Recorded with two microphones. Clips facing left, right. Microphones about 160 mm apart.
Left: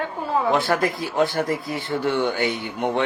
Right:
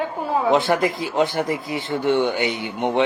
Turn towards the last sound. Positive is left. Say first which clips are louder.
# right 3 dB
turn(degrees=-20)  # may be behind; listen again after turning